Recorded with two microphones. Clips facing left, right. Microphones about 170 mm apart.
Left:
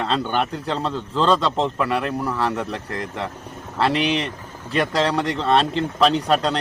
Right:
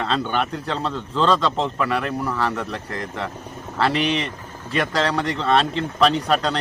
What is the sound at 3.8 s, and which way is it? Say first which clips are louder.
Speech: left 1 dB; centre (ahead or behind).